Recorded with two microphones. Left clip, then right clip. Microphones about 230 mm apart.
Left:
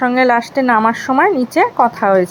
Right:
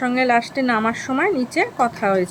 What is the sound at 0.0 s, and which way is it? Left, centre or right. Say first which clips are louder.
A woman's voice: left 5 dB; centre.